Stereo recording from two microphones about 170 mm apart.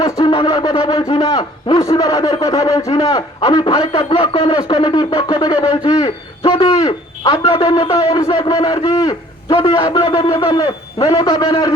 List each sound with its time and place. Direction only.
0.0 s speech: 25° left (ahead or behind)